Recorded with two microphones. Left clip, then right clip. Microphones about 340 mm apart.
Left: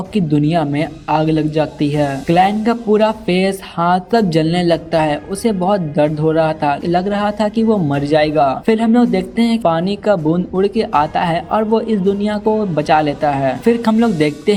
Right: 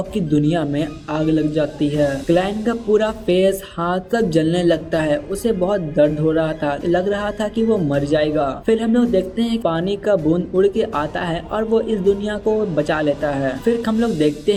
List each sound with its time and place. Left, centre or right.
0.1 s speech: centre